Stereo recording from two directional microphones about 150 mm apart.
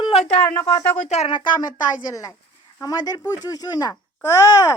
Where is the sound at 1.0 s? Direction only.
45° left (ahead or behind).